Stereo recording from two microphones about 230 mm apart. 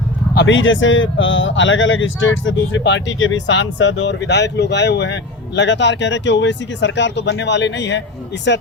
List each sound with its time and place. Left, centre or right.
0.3 s speech: left